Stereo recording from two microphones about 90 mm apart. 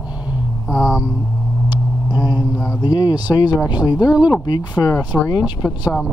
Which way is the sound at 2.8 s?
45° left (ahead or behind).